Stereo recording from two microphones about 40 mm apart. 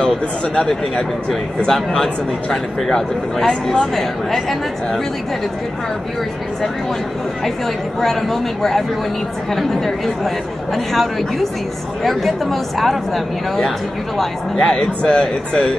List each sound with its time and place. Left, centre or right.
0.6 s speech: centre
8.0 s speech: centre